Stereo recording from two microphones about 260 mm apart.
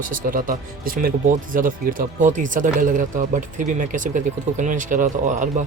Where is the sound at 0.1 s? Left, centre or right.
Right.